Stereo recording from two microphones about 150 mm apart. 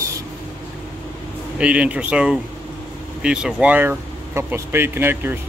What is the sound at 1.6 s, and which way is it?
Speech, 10° right (ahead or behind).